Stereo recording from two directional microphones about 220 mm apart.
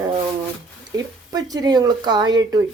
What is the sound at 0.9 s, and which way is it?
Speech, 15° right (ahead or behind).